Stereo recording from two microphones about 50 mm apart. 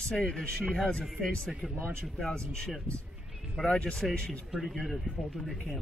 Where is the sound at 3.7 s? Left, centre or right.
Centre.